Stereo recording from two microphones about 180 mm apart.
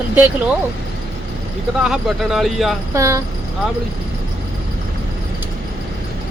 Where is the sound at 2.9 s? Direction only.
15° right (ahead or behind).